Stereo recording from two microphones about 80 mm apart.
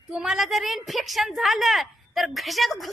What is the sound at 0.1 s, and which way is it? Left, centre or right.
A woman's voice, centre.